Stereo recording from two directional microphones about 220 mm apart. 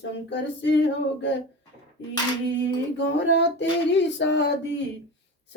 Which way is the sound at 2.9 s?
55° left (ahead or behind).